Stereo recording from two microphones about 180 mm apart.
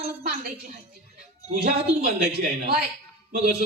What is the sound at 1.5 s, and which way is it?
A child's voice, 55° right (ahead or behind).